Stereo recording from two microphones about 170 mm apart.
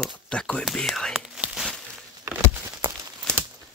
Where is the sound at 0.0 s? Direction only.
5° left (ahead or behind).